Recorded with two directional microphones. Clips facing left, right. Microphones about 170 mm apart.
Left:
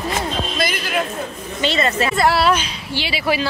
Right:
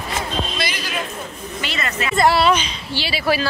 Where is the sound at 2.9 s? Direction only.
20° left (ahead or behind).